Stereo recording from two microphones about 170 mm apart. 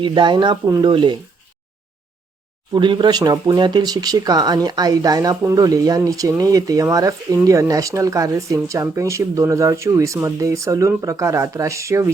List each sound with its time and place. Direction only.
0.0 s speech: 30° right (ahead or behind)
2.7 s speech: 25° right (ahead or behind)